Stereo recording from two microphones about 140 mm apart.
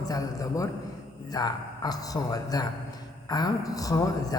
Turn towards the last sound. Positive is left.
turn(degrees=25)  # may be behind; listen again after turning